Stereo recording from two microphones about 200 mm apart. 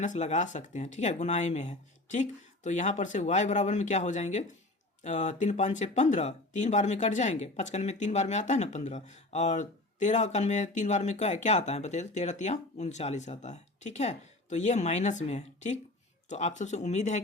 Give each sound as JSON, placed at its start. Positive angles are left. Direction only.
{"t": 0.0, "sound": "speech", "side_deg": 35}